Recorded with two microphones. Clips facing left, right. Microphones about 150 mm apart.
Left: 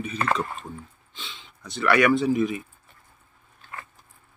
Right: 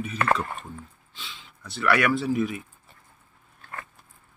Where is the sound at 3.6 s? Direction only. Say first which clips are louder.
Right 1 dB; 50° right (ahead or behind).